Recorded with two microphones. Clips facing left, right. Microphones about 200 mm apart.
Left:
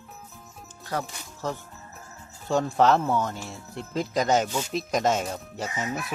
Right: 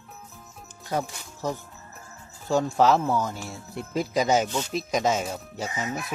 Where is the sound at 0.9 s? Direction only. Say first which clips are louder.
Right 3 dB; 15° right (ahead or behind).